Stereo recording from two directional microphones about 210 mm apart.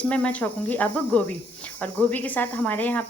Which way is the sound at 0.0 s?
5° left (ahead or behind).